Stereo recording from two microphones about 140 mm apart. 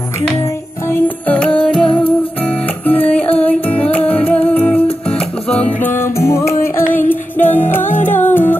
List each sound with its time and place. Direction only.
0.8 s music: 15° left (ahead or behind)